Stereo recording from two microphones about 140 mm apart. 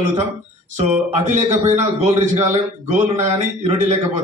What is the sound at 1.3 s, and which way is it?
A man's voice, 55° right (ahead or behind).